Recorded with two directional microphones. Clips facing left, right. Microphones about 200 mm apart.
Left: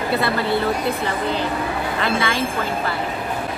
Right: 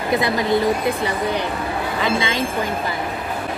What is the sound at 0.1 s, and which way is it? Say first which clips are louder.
Speech: right 3 dB; 15° right (ahead or behind).